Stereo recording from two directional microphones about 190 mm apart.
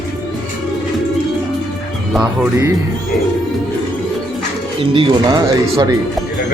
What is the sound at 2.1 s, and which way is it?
Speech, 10° right (ahead or behind).